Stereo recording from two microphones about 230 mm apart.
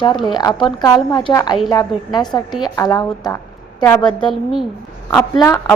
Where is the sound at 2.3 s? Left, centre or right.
Centre.